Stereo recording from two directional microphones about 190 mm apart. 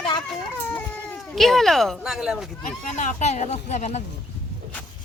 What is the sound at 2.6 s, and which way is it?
Speech, 40° left (ahead or behind).